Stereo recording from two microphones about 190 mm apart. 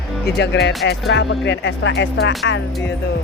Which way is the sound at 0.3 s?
65° left (ahead or behind).